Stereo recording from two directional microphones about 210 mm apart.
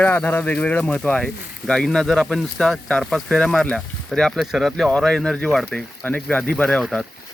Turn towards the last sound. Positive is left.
turn(degrees=0)  # may be behind; listen again after turning